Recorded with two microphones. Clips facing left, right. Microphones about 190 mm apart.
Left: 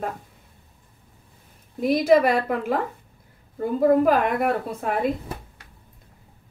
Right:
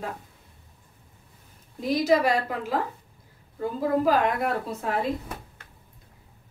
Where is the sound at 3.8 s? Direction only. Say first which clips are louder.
Left 5 dB; 55° left (ahead or behind).